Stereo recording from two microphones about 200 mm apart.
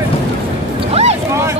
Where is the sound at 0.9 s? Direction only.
30° right (ahead or behind).